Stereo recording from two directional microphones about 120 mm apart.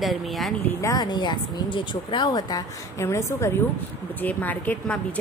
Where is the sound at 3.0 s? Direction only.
25° left (ahead or behind).